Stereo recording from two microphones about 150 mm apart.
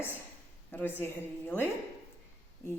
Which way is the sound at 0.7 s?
15° left (ahead or behind).